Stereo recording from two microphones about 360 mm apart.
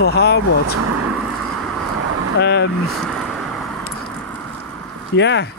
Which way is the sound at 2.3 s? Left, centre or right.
Left.